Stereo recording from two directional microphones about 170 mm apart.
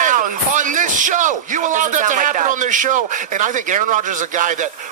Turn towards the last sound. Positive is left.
turn(degrees=-50)  # may be behind; listen again after turning